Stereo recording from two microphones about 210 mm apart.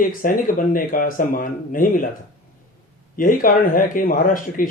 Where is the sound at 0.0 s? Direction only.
40° left (ahead or behind).